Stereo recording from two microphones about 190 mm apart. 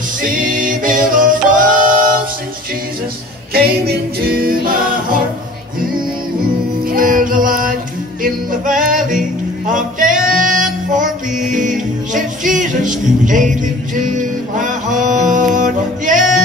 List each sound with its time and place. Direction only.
0.2 s a capella: 45° right (ahead or behind)
3.5 s a capella: 55° right (ahead or behind)
6.9 s music: 45° right (ahead or behind)